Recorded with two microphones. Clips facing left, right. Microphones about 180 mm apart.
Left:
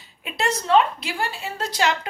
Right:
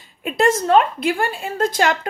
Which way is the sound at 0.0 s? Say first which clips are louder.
Right 9 dB; 50° right (ahead or behind).